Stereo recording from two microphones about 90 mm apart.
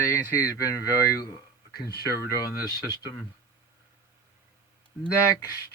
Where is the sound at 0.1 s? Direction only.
30° left (ahead or behind).